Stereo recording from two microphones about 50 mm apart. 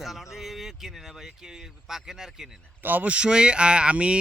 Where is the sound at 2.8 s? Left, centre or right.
Right.